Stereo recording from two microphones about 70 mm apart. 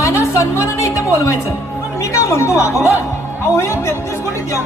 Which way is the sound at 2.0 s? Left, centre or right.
Left.